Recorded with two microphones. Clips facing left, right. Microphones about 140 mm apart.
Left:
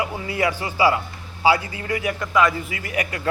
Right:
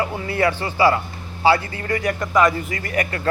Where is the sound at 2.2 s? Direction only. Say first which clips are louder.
Right 2 dB; 20° right (ahead or behind).